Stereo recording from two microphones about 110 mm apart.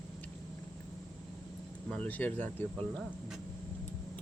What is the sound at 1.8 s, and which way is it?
Speech, 15° left (ahead or behind).